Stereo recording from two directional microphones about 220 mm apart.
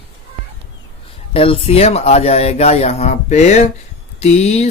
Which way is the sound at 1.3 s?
25° left (ahead or behind).